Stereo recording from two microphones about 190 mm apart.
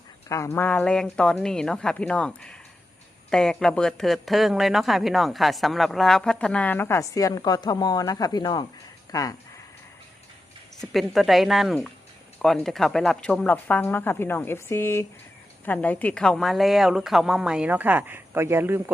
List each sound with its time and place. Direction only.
0.3 s speech: 15° left (ahead or behind)
10.8 s speech: centre (ahead or behind)